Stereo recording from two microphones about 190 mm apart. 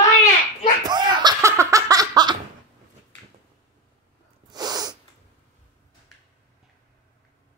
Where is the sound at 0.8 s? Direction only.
20° right (ahead or behind).